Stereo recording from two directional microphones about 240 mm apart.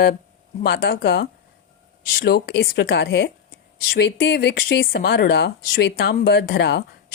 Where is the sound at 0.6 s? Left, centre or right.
Left.